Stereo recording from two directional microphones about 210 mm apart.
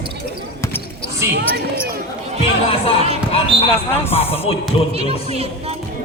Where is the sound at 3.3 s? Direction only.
25° left (ahead or behind).